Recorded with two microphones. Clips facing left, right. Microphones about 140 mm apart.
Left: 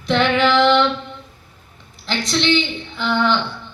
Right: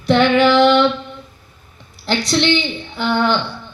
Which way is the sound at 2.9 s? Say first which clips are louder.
Right 2 dB; 10° right (ahead or behind).